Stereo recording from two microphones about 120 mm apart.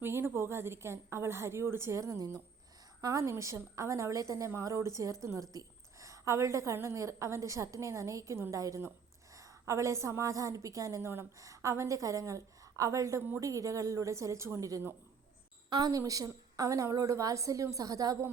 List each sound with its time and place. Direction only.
0.0 s a woman's voice: 20° right (ahead or behind)